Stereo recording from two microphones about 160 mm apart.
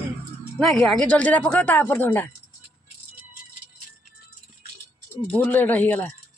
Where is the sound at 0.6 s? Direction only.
5° left (ahead or behind).